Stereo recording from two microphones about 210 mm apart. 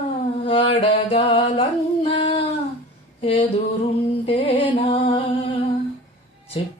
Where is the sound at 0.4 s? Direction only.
25° left (ahead or behind).